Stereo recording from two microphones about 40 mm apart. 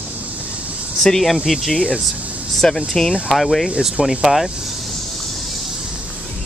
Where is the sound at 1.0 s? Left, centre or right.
Centre.